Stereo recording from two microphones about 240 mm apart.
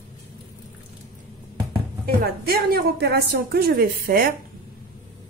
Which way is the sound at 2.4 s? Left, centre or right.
Right.